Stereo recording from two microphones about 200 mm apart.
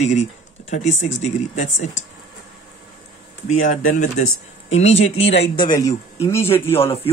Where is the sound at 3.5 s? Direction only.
40° left (ahead or behind).